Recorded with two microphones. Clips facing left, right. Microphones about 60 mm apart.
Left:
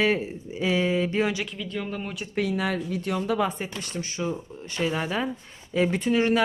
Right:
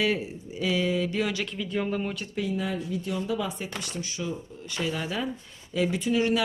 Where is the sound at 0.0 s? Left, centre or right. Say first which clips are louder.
Left 3 dB; left.